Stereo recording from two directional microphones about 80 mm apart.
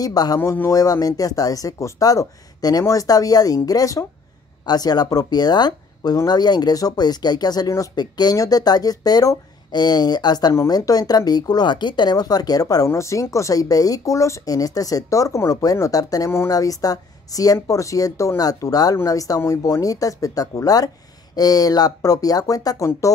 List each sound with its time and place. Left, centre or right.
0.0 s speech: left
22.8 s speech: left